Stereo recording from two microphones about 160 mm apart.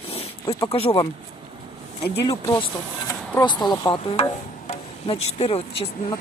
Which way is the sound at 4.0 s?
35° left (ahead or behind).